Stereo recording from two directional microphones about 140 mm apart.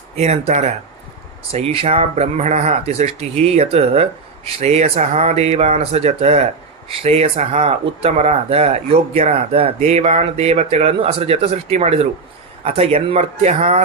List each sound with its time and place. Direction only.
0.2 s speech: 50° right (ahead or behind)